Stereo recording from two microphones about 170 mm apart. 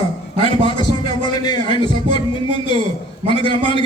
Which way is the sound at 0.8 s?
25° left (ahead or behind).